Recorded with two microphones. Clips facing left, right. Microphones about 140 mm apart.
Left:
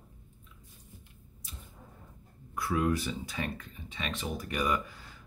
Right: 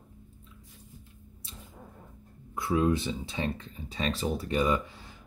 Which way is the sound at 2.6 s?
25° right (ahead or behind).